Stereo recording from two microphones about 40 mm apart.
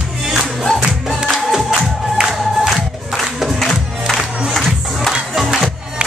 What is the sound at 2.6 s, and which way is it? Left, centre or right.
Crowd, centre.